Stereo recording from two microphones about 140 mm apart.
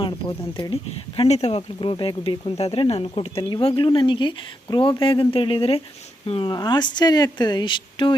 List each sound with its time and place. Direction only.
0.0 s speech: 30° left (ahead or behind)